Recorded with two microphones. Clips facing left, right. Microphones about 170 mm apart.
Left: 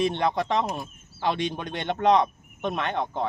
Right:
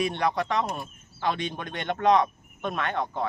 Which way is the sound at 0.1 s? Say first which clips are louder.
Left 2 dB; 25° left (ahead or behind).